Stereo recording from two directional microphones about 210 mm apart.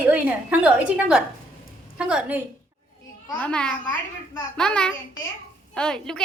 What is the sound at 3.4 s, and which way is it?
A woman's voice, 5° left (ahead or behind).